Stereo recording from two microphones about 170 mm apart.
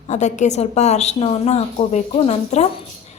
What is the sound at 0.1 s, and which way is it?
A woman's voice, 45° left (ahead or behind).